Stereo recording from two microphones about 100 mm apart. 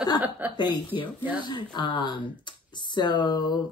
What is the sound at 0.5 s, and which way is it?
Speech, 45° left (ahead or behind).